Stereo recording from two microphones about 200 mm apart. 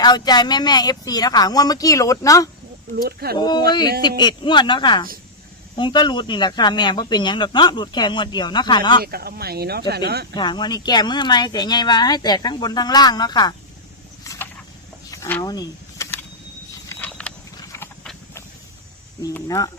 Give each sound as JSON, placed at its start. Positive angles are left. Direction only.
{"t": 0.0, "sound": "speech", "side_deg": 20}
{"t": 2.9, "sound": "speech", "side_deg": -50}
{"t": 3.3, "sound": "speech", "side_deg": 20}
{"t": 9.0, "sound": "speech", "side_deg": -50}
{"t": 10.3, "sound": "speech", "side_deg": 20}
{"t": 14.3, "sound": "a sound", "side_deg": 15}
{"t": 15.1, "sound": "vehicle", "side_deg": 15}
{"t": 16.9, "sound": "a sound", "side_deg": 10}
{"t": 17.6, "sound": "clip-clop", "side_deg": 15}
{"t": 19.2, "sound": "speech", "side_deg": 15}